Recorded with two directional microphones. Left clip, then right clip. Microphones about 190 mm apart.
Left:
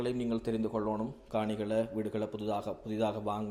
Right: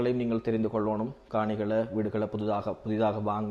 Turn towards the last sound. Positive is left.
turn(degrees=-15)  # may be behind; listen again after turning